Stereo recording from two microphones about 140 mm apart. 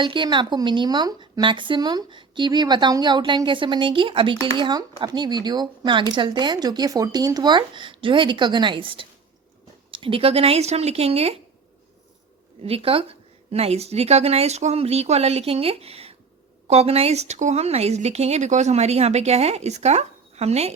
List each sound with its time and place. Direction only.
0.0 s a woman's voice: 35° right (ahead or behind)
12.6 s a woman's voice: 40° right (ahead or behind)